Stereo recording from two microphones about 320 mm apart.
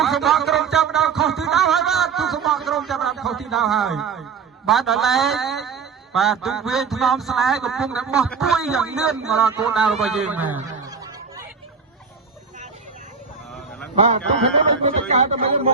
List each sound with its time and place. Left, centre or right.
0.0 s music: centre
4.6 s a man's voice: centre
13.9 s a man's voice: centre